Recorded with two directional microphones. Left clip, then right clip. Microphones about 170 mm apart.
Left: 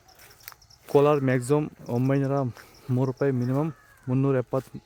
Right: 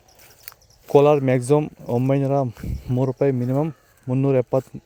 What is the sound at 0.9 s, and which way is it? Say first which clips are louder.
Speech: right 5 dB; 20° right (ahead or behind).